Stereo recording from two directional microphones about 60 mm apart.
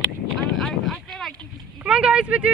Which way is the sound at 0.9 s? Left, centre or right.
Centre.